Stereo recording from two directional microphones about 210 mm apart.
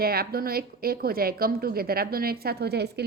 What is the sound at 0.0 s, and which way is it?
A woman's voice, 45° right (ahead or behind).